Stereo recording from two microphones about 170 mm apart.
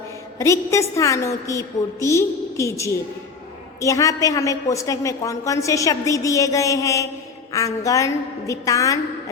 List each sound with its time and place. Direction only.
0.3 s a woman's voice: 15° left (ahead or behind)